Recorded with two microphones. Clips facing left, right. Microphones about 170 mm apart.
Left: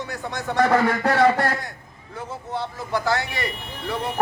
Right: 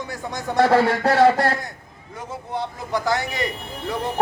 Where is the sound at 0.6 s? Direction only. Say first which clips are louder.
Right 2 dB; 30° right (ahead or behind).